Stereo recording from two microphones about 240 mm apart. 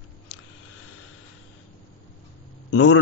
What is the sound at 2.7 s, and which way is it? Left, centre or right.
Speech, left.